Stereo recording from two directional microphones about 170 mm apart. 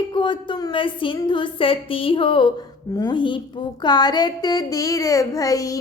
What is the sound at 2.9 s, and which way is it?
A child's voice, 25° left (ahead or behind).